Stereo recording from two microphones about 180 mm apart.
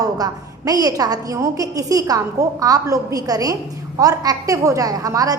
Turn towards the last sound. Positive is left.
turn(degrees=-20)  # may be behind; listen again after turning